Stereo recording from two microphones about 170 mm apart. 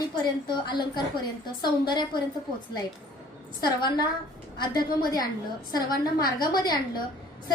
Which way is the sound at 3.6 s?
25° left (ahead or behind).